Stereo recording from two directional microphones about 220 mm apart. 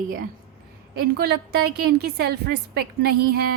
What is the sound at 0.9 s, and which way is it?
A woman's voice, 45° right (ahead or behind).